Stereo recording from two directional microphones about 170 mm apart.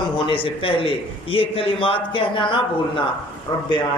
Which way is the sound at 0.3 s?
30° left (ahead or behind).